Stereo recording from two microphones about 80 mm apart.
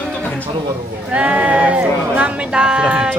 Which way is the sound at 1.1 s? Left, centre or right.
Centre.